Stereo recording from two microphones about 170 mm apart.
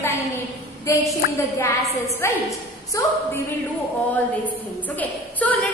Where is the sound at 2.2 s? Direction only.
15° left (ahead or behind).